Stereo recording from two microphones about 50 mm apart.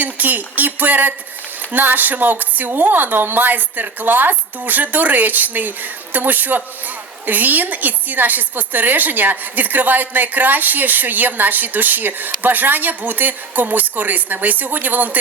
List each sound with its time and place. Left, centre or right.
0.0 s a woman's voice: right